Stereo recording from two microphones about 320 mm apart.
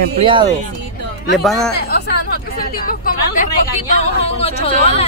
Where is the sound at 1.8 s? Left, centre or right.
Left.